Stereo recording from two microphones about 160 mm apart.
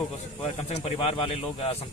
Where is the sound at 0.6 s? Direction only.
40° left (ahead or behind).